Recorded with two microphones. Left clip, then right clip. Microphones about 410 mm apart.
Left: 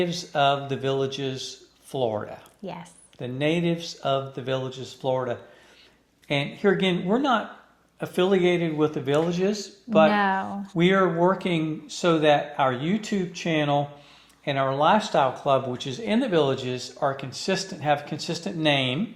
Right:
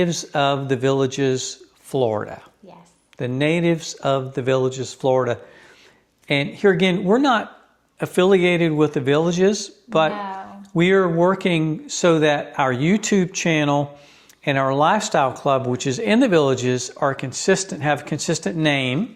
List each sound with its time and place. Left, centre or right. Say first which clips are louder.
0.0 s speech: right 3 dB; right
10.1 s speech: left 5 dB; left
10.8 s speech: right 4 dB; right